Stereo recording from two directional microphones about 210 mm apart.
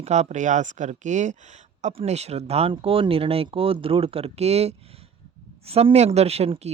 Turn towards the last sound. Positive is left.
turn(degrees=-30)  # may be behind; listen again after turning